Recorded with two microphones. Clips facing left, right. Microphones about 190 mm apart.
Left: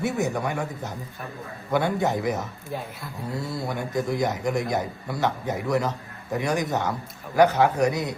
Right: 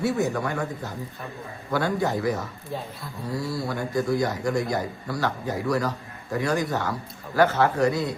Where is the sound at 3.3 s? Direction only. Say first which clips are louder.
Right 2 dB; 25° left (ahead or behind).